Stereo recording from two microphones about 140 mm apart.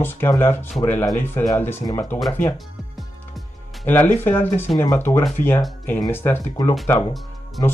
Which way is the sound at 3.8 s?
15° left (ahead or behind).